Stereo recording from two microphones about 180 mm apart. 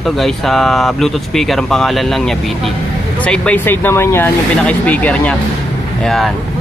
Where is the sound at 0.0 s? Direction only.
Centre (ahead or behind).